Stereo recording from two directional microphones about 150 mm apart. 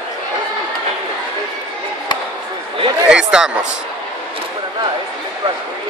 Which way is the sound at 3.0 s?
5° right (ahead or behind).